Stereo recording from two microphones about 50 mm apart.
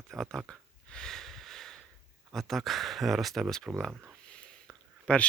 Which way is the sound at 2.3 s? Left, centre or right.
Centre.